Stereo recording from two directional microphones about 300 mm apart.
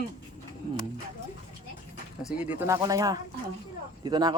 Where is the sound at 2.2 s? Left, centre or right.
Centre.